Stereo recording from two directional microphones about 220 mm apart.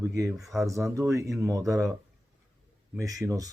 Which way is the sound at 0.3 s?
Centre (ahead or behind).